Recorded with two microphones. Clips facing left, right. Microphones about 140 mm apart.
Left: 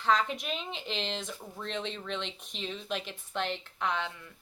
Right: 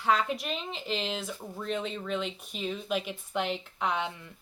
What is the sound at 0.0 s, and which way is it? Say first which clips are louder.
A woman's voice: right 1 dB; 5° right (ahead or behind).